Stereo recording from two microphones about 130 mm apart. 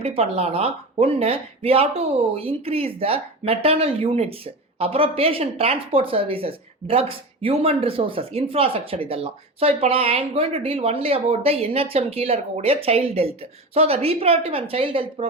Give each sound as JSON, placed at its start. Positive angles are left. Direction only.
{"t": 0.0, "sound": "speech", "side_deg": -50}